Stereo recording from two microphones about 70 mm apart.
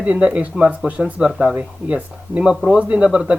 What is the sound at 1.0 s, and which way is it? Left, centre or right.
Speech, centre.